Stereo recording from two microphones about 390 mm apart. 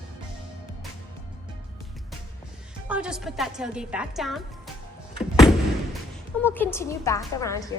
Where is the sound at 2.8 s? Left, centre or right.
Centre.